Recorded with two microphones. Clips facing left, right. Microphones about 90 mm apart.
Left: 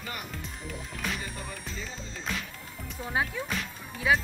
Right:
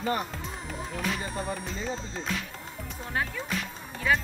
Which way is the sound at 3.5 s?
5° left (ahead or behind).